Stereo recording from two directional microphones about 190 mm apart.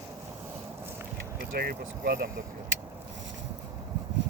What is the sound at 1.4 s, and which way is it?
Speech, 55° right (ahead or behind).